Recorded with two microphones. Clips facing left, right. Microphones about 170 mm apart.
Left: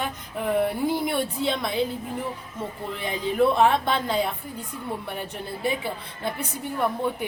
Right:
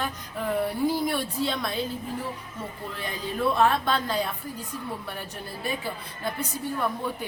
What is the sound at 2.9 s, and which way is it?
A woman's voice, 15° left (ahead or behind).